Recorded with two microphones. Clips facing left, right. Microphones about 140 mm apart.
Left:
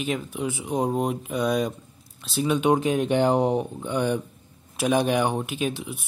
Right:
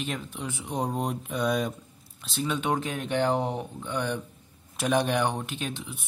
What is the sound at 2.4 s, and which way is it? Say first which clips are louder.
Speech: left 7 dB; 15° left (ahead or behind).